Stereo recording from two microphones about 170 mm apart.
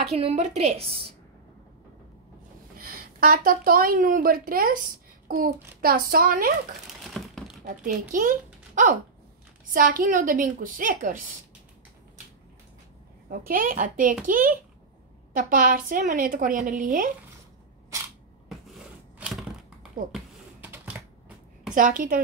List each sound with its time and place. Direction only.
0.0 s a woman's voice: 40° right (ahead or behind)
2.8 s a woman's voice: 60° right (ahead or behind)
7.0 s crumpling: centre (ahead or behind)
7.6 s a woman's voice: 55° right (ahead or behind)
13.5 s a child's voice: 55° right (ahead or behind)
18.5 s a sound: centre (ahead or behind)
20.6 s typing: 10° right (ahead or behind)
21.7 s a woman's voice: 50° right (ahead or behind)